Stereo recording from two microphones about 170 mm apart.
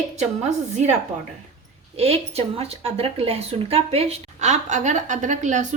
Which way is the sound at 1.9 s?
35° right (ahead or behind).